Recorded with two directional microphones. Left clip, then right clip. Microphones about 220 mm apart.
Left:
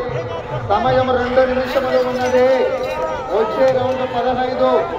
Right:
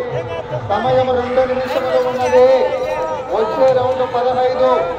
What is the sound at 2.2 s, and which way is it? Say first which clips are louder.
Speech: right 5 dB; 30° right (ahead or behind).